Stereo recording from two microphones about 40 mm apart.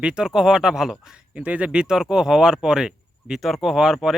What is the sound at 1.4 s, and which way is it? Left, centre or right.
Speech, right.